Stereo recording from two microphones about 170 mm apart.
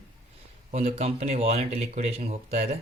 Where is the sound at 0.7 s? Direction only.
40° right (ahead or behind).